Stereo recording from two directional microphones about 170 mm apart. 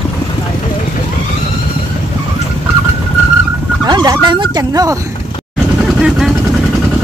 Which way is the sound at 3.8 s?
25° right (ahead or behind).